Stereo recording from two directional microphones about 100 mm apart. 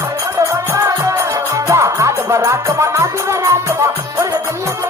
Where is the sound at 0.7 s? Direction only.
30° right (ahead or behind).